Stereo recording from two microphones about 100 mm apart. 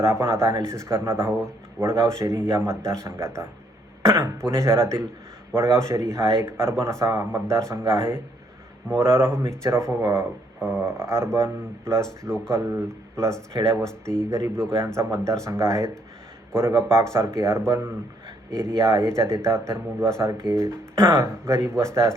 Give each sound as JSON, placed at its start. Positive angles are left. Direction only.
{"t": 0.0, "sound": "speech", "side_deg": -25}
{"t": 18.9, "sound": "speech", "side_deg": -30}